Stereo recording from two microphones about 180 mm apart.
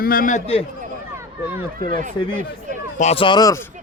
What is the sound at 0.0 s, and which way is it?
Speech, 50° left (ahead or behind).